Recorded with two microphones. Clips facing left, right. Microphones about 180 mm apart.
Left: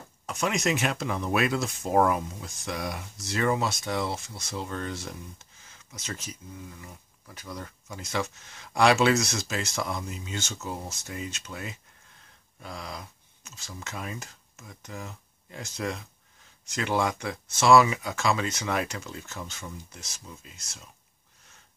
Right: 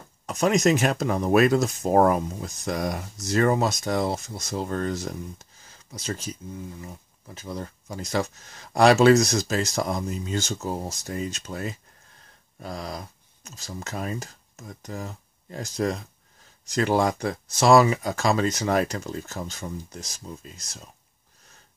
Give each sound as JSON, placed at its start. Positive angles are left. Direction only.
{"t": 0.3, "sound": "speech", "side_deg": -40}